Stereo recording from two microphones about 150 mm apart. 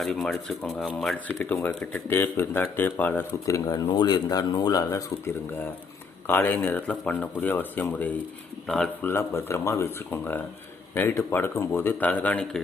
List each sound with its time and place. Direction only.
0.0 s speech: centre (ahead or behind)
1.4 s speech: 15° left (ahead or behind)
9.0 s speech: 15° left (ahead or behind)